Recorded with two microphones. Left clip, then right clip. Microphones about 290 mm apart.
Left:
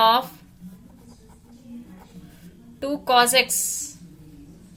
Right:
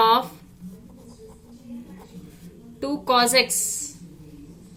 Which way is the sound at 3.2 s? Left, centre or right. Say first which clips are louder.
Even; left.